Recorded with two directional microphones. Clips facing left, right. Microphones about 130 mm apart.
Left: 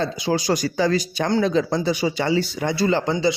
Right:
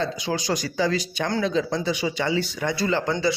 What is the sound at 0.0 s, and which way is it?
Speech, 35° left (ahead or behind).